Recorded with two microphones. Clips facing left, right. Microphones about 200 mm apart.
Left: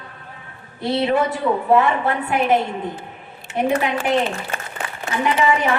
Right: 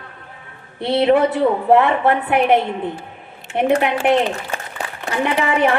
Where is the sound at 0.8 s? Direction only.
60° right (ahead or behind).